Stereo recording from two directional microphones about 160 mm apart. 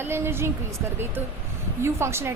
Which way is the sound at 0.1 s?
15° right (ahead or behind).